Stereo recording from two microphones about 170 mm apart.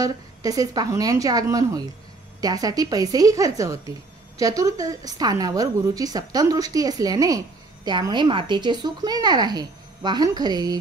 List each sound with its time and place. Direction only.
0.0 s a woman's voice: 20° right (ahead or behind)